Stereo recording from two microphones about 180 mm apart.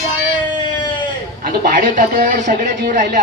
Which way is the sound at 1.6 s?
50° right (ahead or behind).